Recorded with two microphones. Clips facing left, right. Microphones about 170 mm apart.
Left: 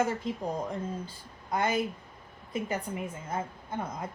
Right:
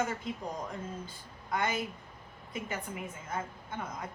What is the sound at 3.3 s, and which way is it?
Speech, 35° left (ahead or behind).